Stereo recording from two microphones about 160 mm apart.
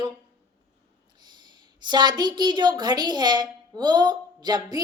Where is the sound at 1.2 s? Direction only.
25° right (ahead or behind).